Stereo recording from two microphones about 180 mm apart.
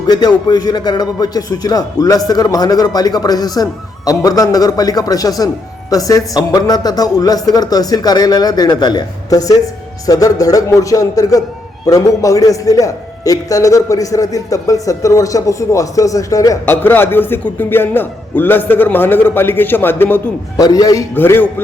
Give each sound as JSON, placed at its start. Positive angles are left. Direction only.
{"t": 0.1, "sound": "a man's voice", "side_deg": 25}